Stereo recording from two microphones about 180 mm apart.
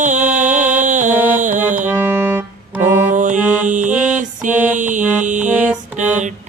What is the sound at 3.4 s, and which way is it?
Music, 10° right (ahead or behind).